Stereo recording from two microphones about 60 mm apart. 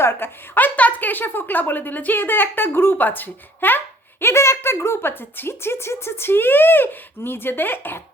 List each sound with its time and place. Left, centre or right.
0.0 s speech: left
4.2 s speech: left